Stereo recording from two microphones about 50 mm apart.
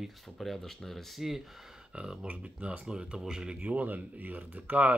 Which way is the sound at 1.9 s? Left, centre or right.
Centre.